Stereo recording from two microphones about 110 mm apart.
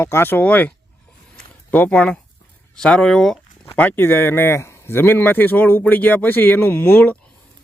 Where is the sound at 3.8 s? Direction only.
15° left (ahead or behind).